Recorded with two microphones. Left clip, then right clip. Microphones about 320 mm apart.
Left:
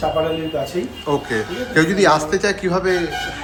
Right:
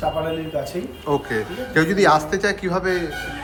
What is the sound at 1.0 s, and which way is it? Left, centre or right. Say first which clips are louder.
A man's voice: left 1 dB; centre.